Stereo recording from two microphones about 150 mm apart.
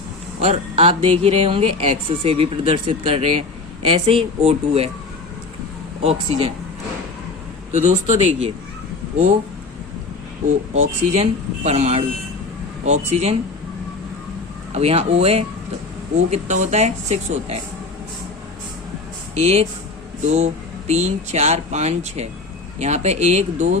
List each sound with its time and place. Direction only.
0.4 s speech: 40° right (ahead or behind)
6.0 s speech: 40° right (ahead or behind)
7.7 s speech: 50° right (ahead or behind)
10.8 s speech: 45° right (ahead or behind)
14.7 s speech: 45° right (ahead or behind)
19.3 s speech: 45° right (ahead or behind)